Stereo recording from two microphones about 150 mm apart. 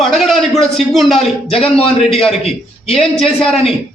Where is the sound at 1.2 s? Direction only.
40° left (ahead or behind).